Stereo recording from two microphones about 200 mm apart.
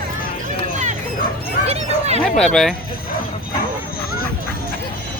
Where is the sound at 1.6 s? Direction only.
30° right (ahead or behind).